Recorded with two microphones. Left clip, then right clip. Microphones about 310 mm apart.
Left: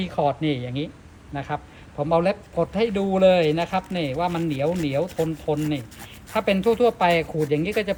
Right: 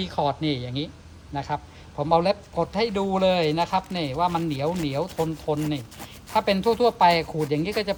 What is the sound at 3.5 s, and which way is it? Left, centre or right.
A man's voice, centre.